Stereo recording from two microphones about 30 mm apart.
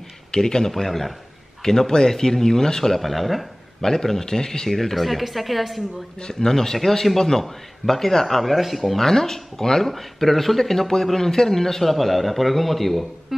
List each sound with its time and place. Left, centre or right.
0.3 s speech: left
0.7 s speech: centre
1.6 s speech: centre
2.9 s a man's voice: centre
3.8 s speech: centre
4.6 s a man's voice: centre
6.2 s speech: centre
9.0 s a man's voice: centre